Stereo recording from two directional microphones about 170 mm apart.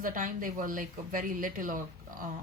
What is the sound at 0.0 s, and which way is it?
A woman's voice, 50° right (ahead or behind).